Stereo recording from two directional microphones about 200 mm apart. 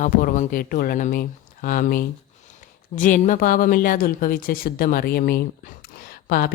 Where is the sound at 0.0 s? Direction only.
40° left (ahead or behind).